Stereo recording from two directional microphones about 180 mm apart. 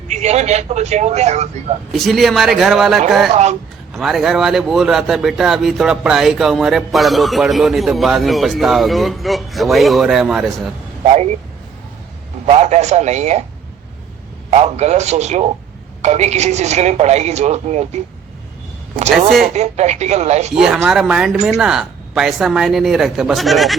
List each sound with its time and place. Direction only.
0.1 s a woman's voice: 40° right (ahead or behind)
1.9 s a man's voice: centre (ahead or behind)
3.3 s a woman's voice: 40° right (ahead or behind)
3.9 s a man's voice: centre (ahead or behind)
11.0 s speech: 35° right (ahead or behind)
12.5 s a woman's voice: 35° right (ahead or behind)
14.5 s a woman's voice: 40° right (ahead or behind)
19.1 s a man's voice: centre (ahead or behind)
19.5 s a woman's voice: 40° right (ahead or behind)
20.5 s a man's voice: 5° right (ahead or behind)